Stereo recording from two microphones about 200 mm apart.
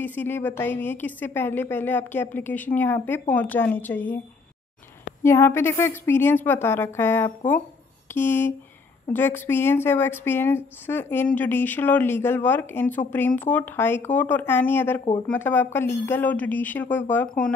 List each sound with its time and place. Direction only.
0.0 s a woman's voice: 10° left (ahead or behind)
5.2 s a woman's voice: 15° left (ahead or behind)